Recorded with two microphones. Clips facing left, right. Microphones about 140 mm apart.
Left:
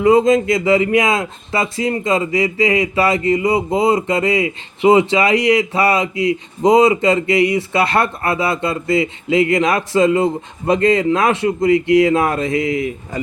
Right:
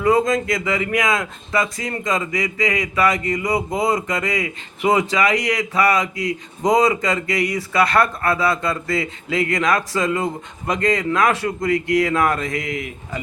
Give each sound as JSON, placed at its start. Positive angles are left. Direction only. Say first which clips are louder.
{"t": 0.0, "sound": "speech", "louder": "left 5 dB", "side_deg": 25}